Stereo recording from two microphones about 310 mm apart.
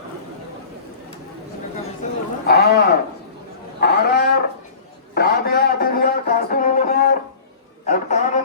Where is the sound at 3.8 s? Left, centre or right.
Left.